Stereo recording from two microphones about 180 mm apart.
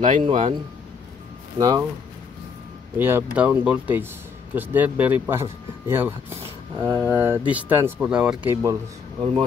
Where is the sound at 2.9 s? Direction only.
10° right (ahead or behind).